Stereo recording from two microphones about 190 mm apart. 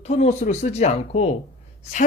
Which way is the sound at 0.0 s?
35° left (ahead or behind).